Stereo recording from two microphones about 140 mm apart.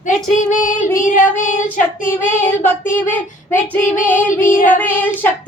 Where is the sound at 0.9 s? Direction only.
70° left (ahead or behind).